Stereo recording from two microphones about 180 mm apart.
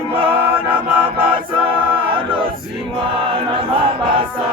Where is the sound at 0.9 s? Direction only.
50° right (ahead or behind).